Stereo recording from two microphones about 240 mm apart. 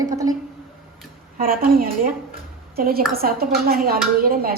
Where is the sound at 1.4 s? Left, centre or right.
Right.